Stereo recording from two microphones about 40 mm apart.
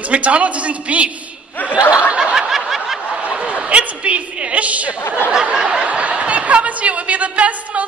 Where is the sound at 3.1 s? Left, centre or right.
Right.